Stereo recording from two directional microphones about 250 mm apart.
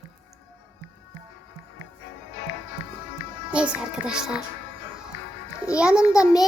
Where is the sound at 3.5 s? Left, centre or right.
Centre.